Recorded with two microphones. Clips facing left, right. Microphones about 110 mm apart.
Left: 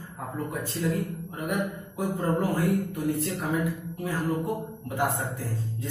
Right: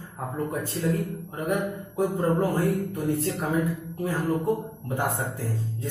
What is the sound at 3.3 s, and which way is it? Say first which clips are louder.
Speech: right 2 dB; 30° right (ahead or behind).